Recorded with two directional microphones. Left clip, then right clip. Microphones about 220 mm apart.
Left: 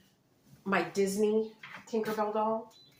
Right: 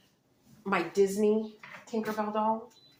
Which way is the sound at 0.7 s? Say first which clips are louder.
Right 3 dB; 20° right (ahead or behind).